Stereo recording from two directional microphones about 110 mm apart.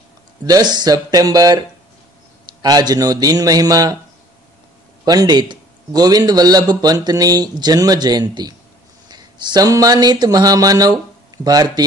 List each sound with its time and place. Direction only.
0.5 s a man's voice: 40° right (ahead or behind)
2.6 s a man's voice: 35° right (ahead or behind)
5.0 s a man's voice: 35° right (ahead or behind)